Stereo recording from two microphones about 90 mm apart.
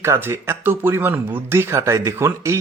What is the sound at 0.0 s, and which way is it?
Speech, 30° right (ahead or behind).